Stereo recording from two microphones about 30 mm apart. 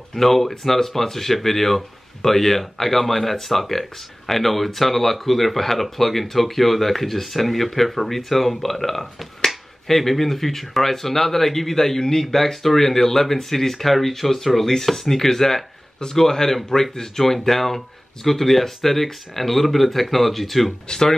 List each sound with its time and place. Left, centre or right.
0.1 s speech: centre